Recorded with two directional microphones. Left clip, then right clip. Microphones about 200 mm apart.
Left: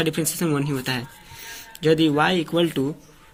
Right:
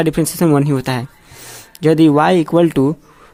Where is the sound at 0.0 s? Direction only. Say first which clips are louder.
Right 8 dB; 50° right (ahead or behind).